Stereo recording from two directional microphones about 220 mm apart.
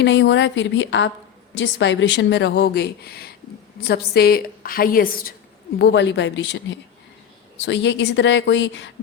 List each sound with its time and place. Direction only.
0.0 s a woman's voice: 55° left (ahead or behind)
5.8 s a woman's voice: 55° left (ahead or behind)